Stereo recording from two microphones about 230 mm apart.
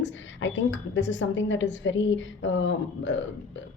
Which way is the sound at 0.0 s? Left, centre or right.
Left.